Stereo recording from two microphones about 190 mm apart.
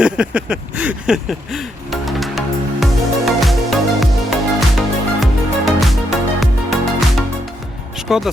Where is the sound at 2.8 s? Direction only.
Centre (ahead or behind).